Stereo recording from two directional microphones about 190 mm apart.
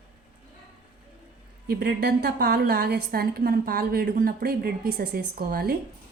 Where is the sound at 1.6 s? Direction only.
55° right (ahead or behind).